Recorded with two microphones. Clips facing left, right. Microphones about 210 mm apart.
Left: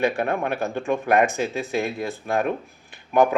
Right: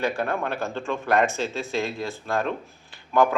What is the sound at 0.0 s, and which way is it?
Speech, 20° left (ahead or behind).